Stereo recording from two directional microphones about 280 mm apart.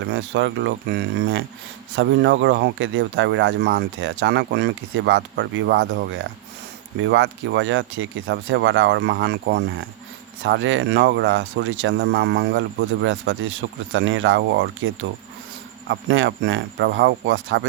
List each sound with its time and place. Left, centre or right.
0.0 s speech: right